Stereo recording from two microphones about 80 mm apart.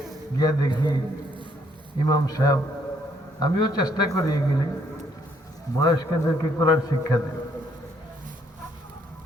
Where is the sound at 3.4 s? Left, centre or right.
Left.